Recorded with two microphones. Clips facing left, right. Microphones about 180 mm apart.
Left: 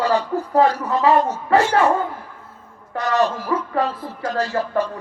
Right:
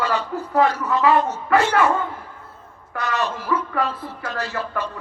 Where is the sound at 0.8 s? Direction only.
35° left (ahead or behind).